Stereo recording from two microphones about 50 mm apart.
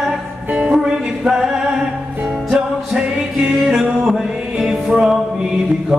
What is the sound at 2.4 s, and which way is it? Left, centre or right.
Music, centre.